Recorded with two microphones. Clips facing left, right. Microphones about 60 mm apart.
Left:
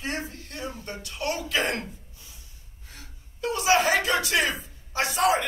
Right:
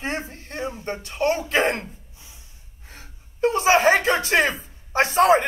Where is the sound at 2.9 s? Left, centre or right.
Right.